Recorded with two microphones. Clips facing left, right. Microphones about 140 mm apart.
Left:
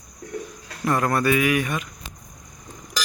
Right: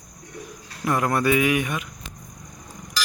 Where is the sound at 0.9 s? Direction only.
15° right (ahead or behind).